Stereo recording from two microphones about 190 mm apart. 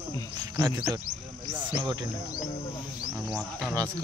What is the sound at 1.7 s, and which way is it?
Speech, 20° right (ahead or behind).